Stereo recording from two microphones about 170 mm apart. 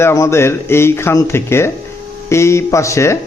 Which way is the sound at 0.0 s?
15° left (ahead or behind).